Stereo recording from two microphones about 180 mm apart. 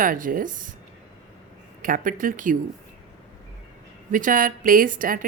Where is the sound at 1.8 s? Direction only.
50° right (ahead or behind).